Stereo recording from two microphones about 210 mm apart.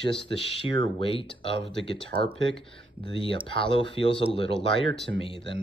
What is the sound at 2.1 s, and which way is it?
Speech, 45° right (ahead or behind).